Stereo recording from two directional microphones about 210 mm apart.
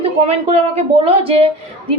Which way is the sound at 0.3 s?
30° right (ahead or behind).